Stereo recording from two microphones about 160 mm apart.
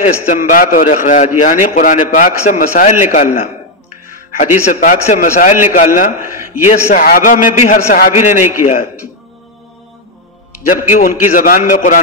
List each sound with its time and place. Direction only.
0.0 s a man's voice: 55° left (ahead or behind)
4.4 s a man's voice: 50° left (ahead or behind)
10.7 s a man's voice: 55° left (ahead or behind)